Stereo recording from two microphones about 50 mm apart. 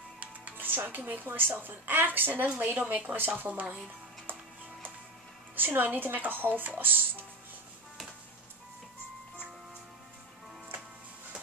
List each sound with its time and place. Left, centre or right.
0.2 s a woman's voice: right
5.6 s a woman's voice: right